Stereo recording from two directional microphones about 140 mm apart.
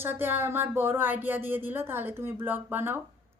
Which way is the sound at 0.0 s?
15° right (ahead or behind).